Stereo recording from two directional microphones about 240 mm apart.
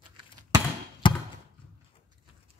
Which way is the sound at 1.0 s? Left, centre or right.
Centre.